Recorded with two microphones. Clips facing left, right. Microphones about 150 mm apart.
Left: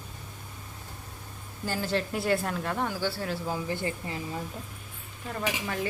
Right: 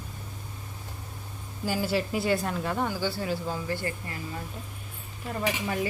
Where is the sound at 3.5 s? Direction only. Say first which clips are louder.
Even; 20° left (ahead or behind).